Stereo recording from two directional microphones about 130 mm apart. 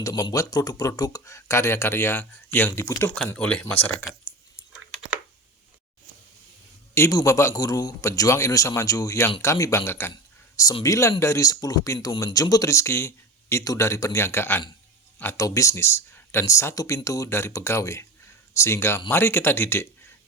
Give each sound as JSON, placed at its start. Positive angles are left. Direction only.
{"t": 0.0, "sound": "speech", "side_deg": 30}
{"t": 3.2, "sound": "speech", "side_deg": 10}
{"t": 6.9, "sound": "speech", "side_deg": 25}